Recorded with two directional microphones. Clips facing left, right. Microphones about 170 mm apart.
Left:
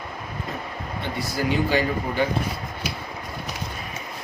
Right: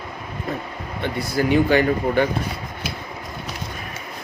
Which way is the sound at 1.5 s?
60° right (ahead or behind).